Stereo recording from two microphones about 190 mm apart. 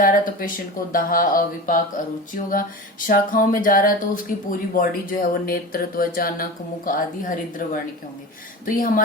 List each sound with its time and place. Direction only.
0.0 s speech: 45° left (ahead or behind)